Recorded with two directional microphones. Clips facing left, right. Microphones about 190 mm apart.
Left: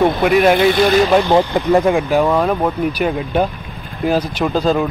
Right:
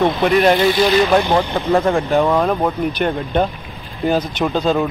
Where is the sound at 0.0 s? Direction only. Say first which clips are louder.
Left 1 dB; 5° left (ahead or behind).